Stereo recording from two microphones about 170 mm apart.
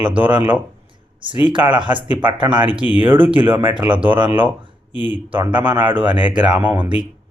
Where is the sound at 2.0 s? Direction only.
10° right (ahead or behind).